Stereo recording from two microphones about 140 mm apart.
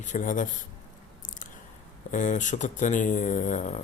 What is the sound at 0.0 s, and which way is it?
Speech, 65° left (ahead or behind).